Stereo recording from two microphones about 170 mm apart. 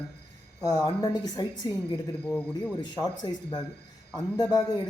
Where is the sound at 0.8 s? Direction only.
25° left (ahead or behind).